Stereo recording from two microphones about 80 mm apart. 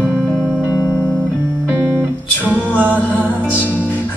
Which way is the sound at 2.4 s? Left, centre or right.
Right.